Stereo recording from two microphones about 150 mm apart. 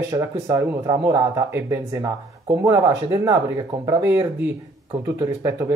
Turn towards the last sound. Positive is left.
turn(degrees=-15)  # may be behind; listen again after turning